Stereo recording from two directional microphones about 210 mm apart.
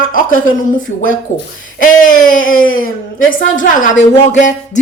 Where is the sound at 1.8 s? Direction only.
40° left (ahead or behind).